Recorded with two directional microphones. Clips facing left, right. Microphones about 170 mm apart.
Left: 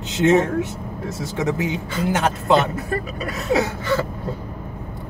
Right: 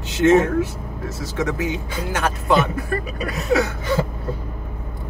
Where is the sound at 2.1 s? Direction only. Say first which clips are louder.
Left 1 dB; 20° left (ahead or behind).